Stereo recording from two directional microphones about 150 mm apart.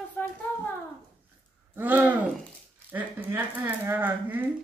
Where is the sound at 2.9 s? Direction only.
10° right (ahead or behind).